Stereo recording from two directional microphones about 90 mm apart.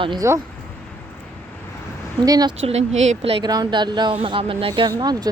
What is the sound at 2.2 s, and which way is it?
Speech, 45° right (ahead or behind).